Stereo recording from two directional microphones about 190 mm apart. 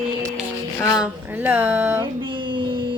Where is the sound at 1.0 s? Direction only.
10° right (ahead or behind).